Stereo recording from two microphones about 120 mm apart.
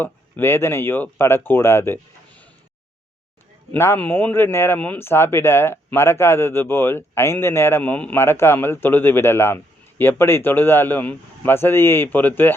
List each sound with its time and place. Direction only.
0.0 s speech: 20° left (ahead or behind)
3.7 s speech: 20° left (ahead or behind)